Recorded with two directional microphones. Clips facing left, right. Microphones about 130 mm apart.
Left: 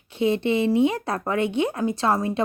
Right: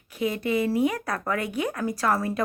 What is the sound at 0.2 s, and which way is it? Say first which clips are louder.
Speech: left 4 dB; 25° left (ahead or behind).